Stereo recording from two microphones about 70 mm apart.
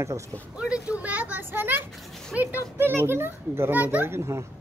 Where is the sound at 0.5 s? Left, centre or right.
Centre; by 1.8 s right.